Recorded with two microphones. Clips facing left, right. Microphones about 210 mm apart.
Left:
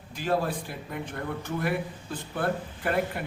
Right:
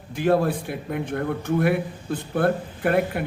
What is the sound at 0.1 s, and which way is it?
Speech, 60° right (ahead or behind).